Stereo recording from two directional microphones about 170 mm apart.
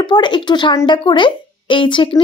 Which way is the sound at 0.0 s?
25° left (ahead or behind).